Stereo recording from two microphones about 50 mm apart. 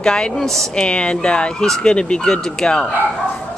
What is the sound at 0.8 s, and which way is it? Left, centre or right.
Speech, left.